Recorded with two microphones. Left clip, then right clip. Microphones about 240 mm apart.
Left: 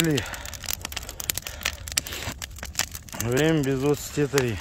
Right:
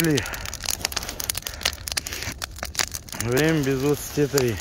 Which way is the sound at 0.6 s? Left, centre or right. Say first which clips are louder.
Right 7 dB; centre.